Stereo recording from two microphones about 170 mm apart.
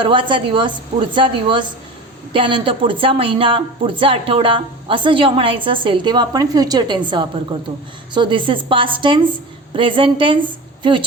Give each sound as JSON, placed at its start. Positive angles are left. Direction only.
{"t": 0.0, "sound": "a woman's voice", "side_deg": -30}